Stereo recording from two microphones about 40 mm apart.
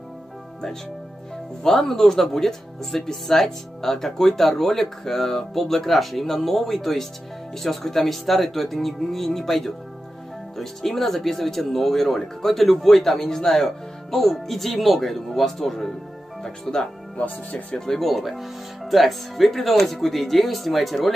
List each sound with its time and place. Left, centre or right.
1.6 s speech: centre
17.2 s speech: left
17.7 s speech: centre